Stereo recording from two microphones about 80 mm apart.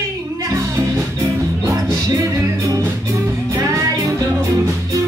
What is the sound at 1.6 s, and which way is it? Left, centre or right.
Music, right.